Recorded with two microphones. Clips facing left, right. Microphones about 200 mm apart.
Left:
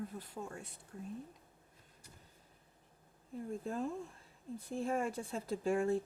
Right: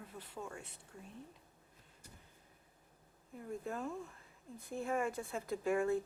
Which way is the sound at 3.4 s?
30° left (ahead or behind).